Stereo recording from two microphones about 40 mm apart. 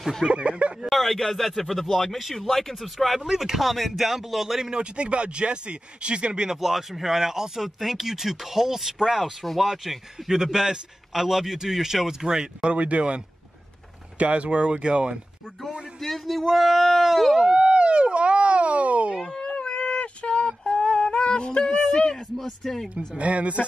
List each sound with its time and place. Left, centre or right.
0.3 s speech: right
0.8 s a man's voice: centre
4.6 s speech: right
6.5 s speech: centre
9.7 s speech: centre
12.6 s speech: right
16.0 s a man's voice: centre
17.4 s a sound: right
19.4 s a sound: left
21.6 s speech: centre
22.9 s speech: right